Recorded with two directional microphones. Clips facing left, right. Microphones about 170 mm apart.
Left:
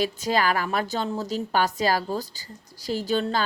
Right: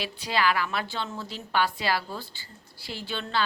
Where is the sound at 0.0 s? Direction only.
45° left (ahead or behind).